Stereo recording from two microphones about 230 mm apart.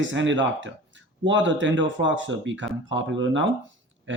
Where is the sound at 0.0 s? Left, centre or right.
Right.